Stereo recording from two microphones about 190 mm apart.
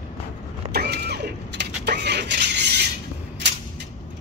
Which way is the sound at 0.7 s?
55° right (ahead or behind).